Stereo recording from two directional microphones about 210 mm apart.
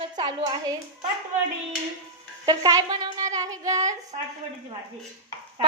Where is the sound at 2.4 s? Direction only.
20° right (ahead or behind).